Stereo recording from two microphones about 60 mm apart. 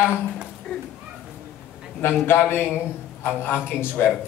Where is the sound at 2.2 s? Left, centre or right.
Left.